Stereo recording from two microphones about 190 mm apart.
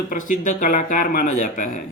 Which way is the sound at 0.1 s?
45° left (ahead or behind).